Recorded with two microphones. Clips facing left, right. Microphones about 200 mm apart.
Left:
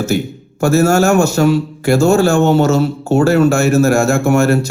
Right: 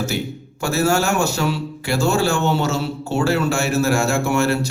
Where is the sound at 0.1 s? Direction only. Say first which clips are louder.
Left 7 dB; 45° left (ahead or behind).